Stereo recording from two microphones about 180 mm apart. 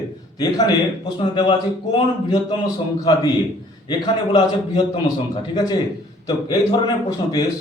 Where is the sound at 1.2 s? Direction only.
25° left (ahead or behind).